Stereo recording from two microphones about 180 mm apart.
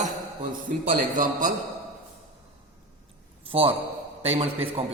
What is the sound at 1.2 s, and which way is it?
Speech, 45° right (ahead or behind).